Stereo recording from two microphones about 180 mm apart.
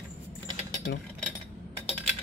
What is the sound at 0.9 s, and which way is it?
Speech, 70° left (ahead or behind).